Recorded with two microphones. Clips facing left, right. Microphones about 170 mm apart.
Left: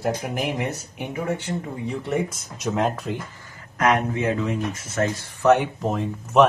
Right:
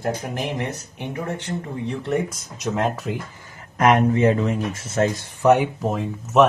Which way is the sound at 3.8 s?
30° right (ahead or behind).